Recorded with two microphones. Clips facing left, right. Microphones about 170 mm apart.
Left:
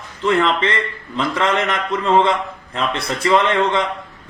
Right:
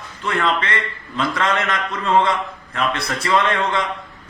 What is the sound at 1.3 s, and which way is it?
Speech, 25° left (ahead or behind).